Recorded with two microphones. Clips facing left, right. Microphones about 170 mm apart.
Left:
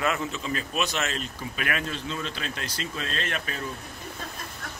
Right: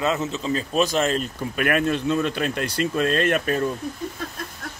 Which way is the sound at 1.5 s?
50° right (ahead or behind).